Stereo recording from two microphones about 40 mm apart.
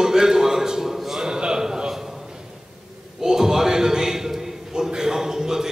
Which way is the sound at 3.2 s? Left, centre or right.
Centre.